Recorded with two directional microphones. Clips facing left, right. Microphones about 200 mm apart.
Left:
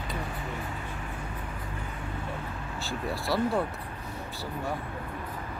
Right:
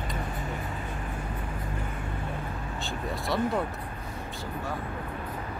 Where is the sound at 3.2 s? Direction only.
5° left (ahead or behind).